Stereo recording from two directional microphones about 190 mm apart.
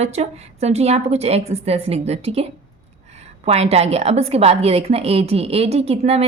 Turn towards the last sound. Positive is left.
turn(degrees=-30)  # may be behind; listen again after turning